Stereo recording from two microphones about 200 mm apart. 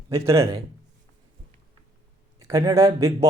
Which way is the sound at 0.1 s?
15° right (ahead or behind).